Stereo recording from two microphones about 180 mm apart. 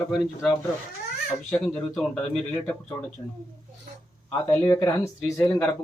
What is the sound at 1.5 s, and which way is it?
Speech, 5° left (ahead or behind).